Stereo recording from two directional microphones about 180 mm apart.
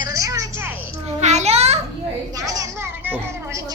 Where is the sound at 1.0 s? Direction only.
40° right (ahead or behind).